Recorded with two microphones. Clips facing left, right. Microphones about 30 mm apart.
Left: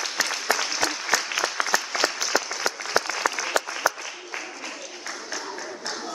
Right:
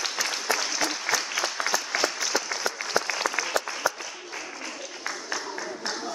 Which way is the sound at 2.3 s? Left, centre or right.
Left.